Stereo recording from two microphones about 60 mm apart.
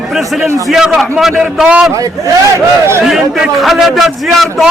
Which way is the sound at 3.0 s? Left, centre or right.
Centre.